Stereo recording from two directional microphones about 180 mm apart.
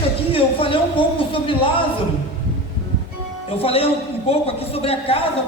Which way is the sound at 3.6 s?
30° left (ahead or behind).